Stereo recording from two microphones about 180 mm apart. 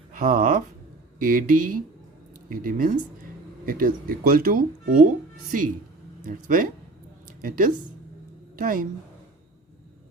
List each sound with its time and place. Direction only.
0.1 s a sound: 50° right (ahead or behind)
1.2 s speech: 50° right (ahead or behind)
6.2 s speech: 50° right (ahead or behind)